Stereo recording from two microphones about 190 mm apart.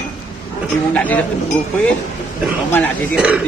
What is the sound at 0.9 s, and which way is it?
Speech, 5° left (ahead or behind).